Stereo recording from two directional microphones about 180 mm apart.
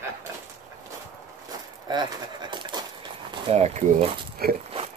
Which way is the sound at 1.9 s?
25° right (ahead or behind).